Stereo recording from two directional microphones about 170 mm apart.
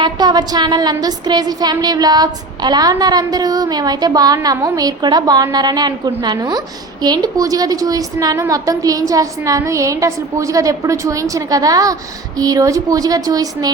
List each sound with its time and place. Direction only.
0.0 s a woman's voice: 25° right (ahead or behind)